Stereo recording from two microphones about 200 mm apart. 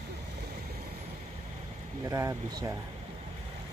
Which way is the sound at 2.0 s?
15° right (ahead or behind).